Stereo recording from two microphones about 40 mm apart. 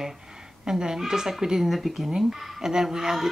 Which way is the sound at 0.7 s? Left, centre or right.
Centre.